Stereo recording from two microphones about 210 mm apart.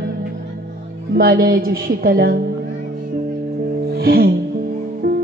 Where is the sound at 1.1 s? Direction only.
45° right (ahead or behind).